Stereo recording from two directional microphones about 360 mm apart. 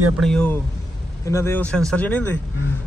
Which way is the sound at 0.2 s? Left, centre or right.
Centre.